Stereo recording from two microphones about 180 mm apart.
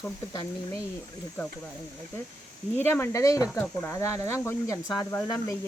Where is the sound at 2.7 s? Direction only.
10° left (ahead or behind).